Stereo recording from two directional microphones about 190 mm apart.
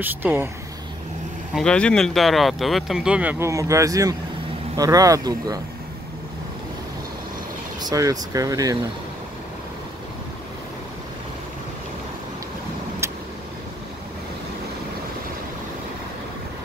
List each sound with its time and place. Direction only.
0.0 s speech: 10° right (ahead or behind)
1.5 s speech: 5° left (ahead or behind); by 5.6 s 20° right (ahead or behind)
7.9 s speech: 20° right (ahead or behind)